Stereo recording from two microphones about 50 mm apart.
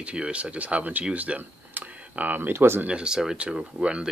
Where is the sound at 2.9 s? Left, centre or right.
Centre.